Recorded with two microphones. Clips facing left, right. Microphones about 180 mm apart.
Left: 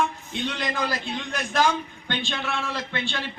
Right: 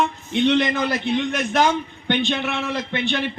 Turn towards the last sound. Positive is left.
turn(degrees=-20)  # may be behind; listen again after turning